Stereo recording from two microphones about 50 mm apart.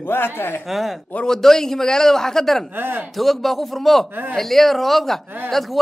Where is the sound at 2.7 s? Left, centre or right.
Right.